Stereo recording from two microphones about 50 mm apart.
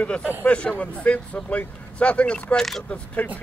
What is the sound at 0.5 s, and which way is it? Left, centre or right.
Speech, left.